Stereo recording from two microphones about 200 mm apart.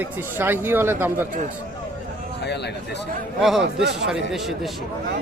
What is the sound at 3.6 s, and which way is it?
Speech, 60° right (ahead or behind).